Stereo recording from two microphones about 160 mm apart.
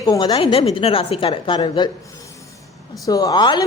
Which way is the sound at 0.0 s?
25° left (ahead or behind).